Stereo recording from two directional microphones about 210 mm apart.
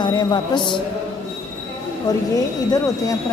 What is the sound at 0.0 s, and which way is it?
Speech, 20° left (ahead or behind).